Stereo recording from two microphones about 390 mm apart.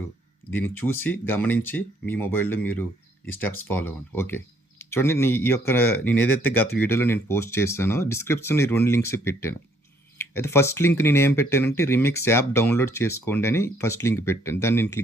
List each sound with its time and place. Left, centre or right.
0.7 s speech: centre